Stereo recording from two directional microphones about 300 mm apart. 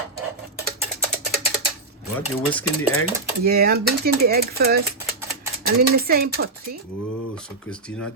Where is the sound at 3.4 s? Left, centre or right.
Right.